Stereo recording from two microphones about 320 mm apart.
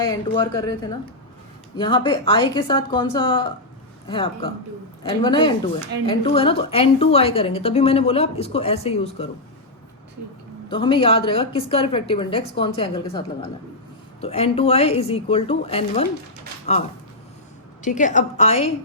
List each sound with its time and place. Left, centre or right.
1.7 s a woman's voice: centre
10.7 s a woman's voice: centre
17.8 s a woman's voice: left